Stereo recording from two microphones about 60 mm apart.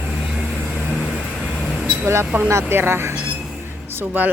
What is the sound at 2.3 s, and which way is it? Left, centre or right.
Speech, right.